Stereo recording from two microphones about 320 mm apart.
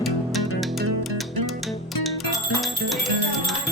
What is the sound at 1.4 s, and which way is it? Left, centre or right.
Music, right.